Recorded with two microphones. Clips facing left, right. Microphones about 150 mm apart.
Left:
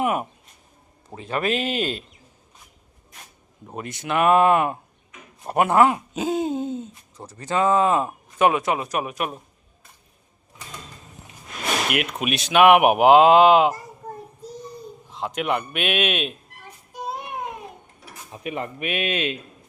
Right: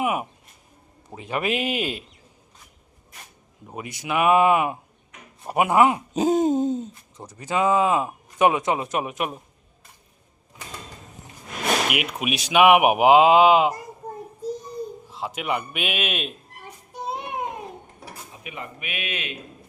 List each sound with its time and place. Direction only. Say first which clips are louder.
0.0 s speech: left 2 dB; 10° right (ahead or behind)
3.8 s speech: left 1 dB; 10° right (ahead or behind)
6.1 s hoot: right 4 dB; 45° right (ahead or behind)
7.2 s speech: left 1 dB; 10° right (ahead or behind)
8.4 s speech: even; 20° right (ahead or behind)
11.9 s speech: left 2 dB; 10° right (ahead or behind)
15.1 s a man's voice: left 3 dB; 5° right (ahead or behind)
18.4 s speech: left 9 dB; 35° left (ahead or behind)